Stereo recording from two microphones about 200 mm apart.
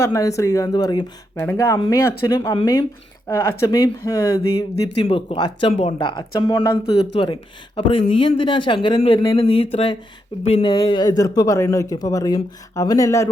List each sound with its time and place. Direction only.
0.0 s speech: 15° left (ahead or behind)
5.0 s speech: 25° left (ahead or behind)